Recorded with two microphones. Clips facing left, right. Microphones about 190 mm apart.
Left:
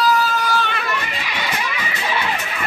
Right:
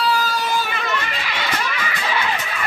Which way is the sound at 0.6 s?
5° right (ahead or behind).